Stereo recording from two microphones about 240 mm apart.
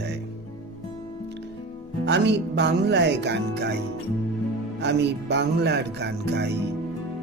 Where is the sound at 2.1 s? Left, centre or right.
Right.